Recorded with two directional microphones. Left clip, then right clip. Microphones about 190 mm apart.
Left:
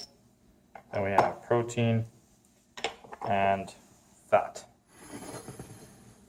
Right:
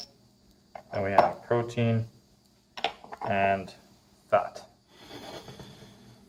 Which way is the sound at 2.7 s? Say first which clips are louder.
Right 4 dB; 15° right (ahead or behind).